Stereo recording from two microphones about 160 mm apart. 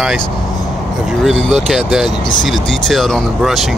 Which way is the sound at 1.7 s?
5° right (ahead or behind).